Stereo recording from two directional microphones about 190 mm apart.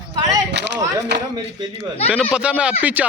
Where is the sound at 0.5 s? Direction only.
65° right (ahead or behind).